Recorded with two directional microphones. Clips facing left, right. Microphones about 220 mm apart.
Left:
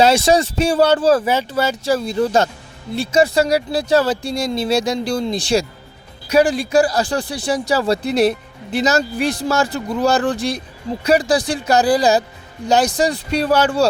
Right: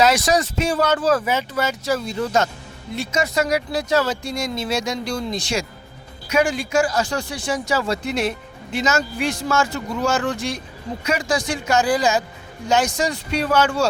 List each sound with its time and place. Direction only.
0.0 s speech: 25° left (ahead or behind)